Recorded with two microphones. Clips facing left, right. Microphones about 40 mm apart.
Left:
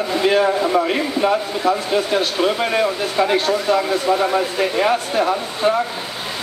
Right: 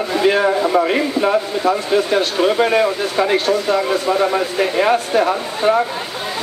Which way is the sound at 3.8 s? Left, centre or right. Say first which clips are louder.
Right 1 dB; centre.